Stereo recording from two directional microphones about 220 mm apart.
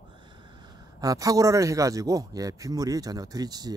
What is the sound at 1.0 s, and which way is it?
Speech, 15° right (ahead or behind).